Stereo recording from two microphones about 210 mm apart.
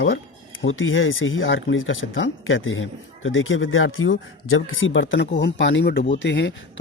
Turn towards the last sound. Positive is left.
turn(degrees=60)  # may be behind; listen again after turning